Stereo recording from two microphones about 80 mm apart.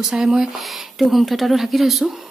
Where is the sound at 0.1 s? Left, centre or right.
Centre.